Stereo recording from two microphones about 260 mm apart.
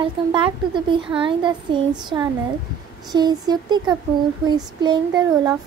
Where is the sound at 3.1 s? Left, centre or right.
Centre.